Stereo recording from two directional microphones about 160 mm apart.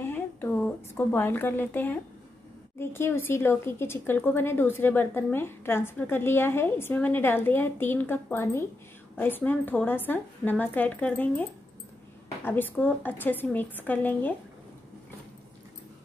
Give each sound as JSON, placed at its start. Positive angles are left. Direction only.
{"t": 0.0, "sound": "a woman's voice", "side_deg": 15}
{"t": 12.4, "sound": "speech", "side_deg": 10}